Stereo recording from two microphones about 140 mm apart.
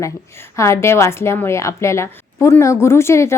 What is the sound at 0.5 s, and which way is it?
Speech, 20° left (ahead or behind).